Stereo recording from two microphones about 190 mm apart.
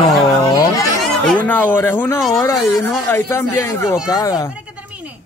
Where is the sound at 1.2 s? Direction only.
5° left (ahead or behind).